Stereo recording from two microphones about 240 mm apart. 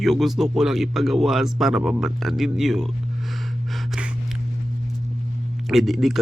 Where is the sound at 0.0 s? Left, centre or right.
Centre.